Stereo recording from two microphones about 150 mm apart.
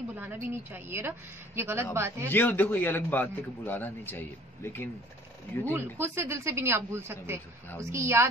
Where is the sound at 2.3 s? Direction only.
10° left (ahead or behind).